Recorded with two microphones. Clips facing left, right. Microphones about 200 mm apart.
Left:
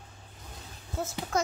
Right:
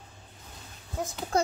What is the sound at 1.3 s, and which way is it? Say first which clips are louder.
Speech: right 3 dB; 30° right (ahead or behind).